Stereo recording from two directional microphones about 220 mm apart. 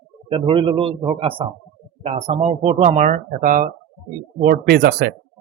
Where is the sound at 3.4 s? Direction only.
45° right (ahead or behind).